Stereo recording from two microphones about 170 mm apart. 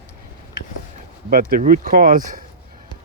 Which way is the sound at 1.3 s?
55° right (ahead or behind).